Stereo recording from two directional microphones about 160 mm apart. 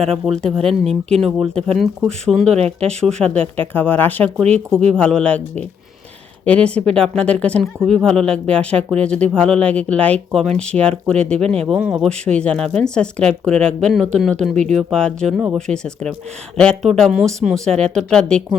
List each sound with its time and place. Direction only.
0.3 s speech: centre (ahead or behind)
0.6 s speech: 40° right (ahead or behind)
1.2 s speech: centre (ahead or behind)
2.5 s speech: 40° right (ahead or behind)
3.2 s speech: 5° left (ahead or behind)